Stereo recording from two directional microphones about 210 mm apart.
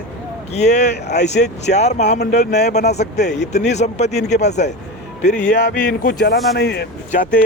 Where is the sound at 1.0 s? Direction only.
55° left (ahead or behind).